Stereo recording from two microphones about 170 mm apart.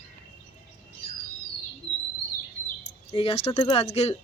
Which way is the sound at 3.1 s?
35° left (ahead or behind).